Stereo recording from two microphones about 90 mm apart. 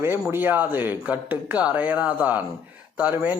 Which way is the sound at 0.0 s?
25° right (ahead or behind).